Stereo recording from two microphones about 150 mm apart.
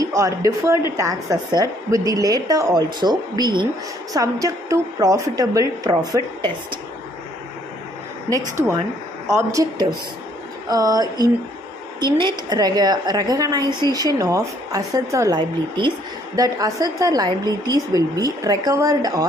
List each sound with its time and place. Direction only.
0.0 s a woman's voice: 20° right (ahead or behind)
9.3 s a woman's voice: 20° right (ahead or behind)